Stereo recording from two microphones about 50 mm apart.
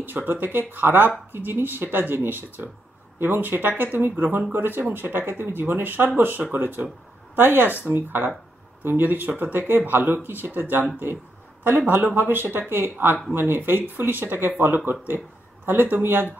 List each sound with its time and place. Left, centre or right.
0.0 s a woman's voice: right